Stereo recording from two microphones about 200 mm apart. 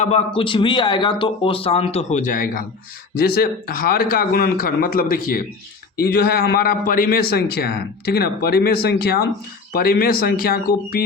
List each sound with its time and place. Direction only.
0.0 s a man's voice: 30° left (ahead or behind); by 11.0 s 50° left (ahead or behind)